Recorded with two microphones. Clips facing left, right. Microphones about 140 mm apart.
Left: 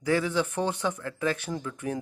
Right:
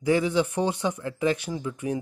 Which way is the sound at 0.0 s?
15° right (ahead or behind).